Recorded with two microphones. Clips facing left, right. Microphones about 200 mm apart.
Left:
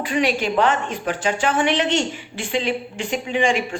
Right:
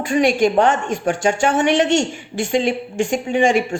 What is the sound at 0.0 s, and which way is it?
A woman's voice, 45° right (ahead or behind).